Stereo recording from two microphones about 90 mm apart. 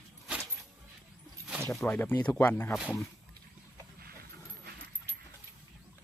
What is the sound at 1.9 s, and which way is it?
Speech, 20° left (ahead or behind).